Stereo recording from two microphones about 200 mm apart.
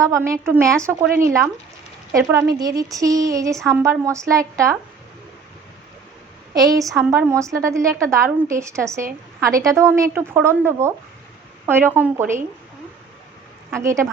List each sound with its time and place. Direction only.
0.0 s a woman's voice: 15° right (ahead or behind)
6.6 s a woman's voice: 15° right (ahead or behind)
13.7 s a woman's voice: 15° right (ahead or behind)